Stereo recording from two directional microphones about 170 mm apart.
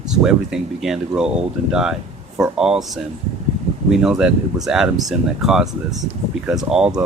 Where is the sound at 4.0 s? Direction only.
5° right (ahead or behind).